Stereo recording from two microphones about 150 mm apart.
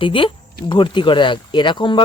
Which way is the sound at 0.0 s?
35° left (ahead or behind).